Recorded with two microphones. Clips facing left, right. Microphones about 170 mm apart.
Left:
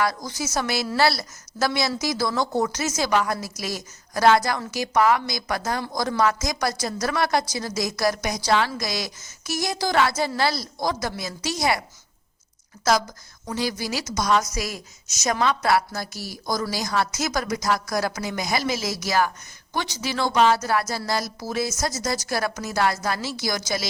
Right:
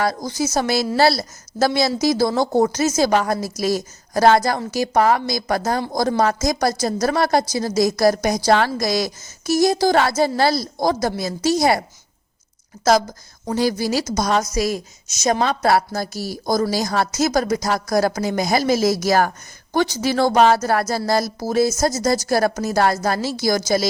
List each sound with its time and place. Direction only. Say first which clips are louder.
0.0 s a woman's voice: right 4 dB; 30° right (ahead or behind)